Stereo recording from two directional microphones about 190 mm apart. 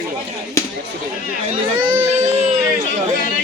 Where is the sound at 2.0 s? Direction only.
35° right (ahead or behind).